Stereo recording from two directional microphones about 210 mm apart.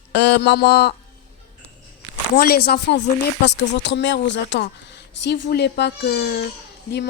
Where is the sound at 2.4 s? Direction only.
45° left (ahead or behind).